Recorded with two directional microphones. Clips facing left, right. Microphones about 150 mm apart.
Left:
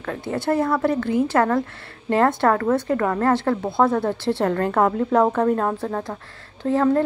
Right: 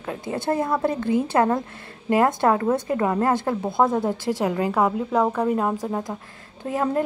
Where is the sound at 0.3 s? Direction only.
20° right (ahead or behind).